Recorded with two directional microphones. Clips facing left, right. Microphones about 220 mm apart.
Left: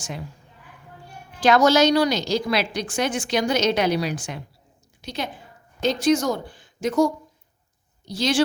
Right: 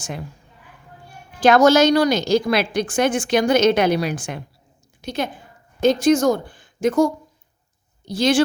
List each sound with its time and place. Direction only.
1.4 s a woman's voice: 50° right (ahead or behind)